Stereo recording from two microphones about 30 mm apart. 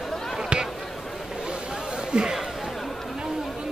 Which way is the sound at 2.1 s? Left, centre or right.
Right.